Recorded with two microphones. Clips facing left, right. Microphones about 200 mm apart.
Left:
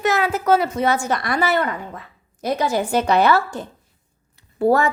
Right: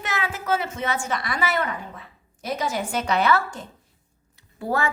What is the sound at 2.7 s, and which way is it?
Speech, 35° left (ahead or behind).